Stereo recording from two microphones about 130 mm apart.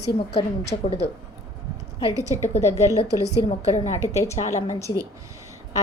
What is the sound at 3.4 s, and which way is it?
A woman's voice, 55° left (ahead or behind).